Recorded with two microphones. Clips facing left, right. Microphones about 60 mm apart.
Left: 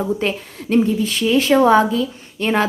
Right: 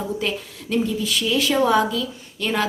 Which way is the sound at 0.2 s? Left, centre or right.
Left.